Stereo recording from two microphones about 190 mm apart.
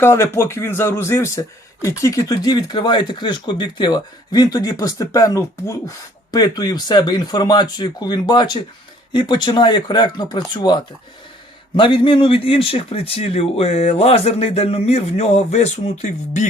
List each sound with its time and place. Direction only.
0.0 s speech: 15° left (ahead or behind)
11.8 s a man's voice: 25° left (ahead or behind)